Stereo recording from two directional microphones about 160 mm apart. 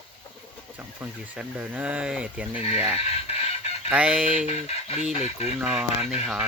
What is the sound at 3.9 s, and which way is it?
Speech, 5° right (ahead or behind).